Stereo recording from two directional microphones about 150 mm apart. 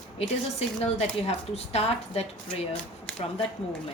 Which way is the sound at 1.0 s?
45° left (ahead or behind).